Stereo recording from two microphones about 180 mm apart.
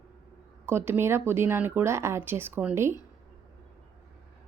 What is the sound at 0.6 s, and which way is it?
A woman's voice, 15° right (ahead or behind).